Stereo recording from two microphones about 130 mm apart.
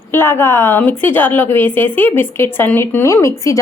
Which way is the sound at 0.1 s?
20° left (ahead or behind).